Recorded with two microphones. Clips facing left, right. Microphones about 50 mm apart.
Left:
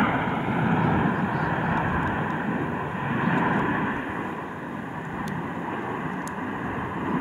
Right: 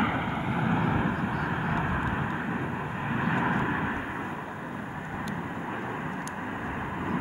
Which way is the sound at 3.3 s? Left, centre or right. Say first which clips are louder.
Left 4 dB; left.